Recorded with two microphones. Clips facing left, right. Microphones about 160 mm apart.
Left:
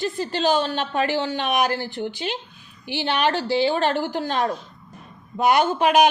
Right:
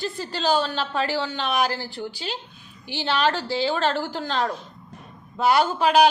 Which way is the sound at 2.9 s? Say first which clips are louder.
Left 1 dB; 15° left (ahead or behind).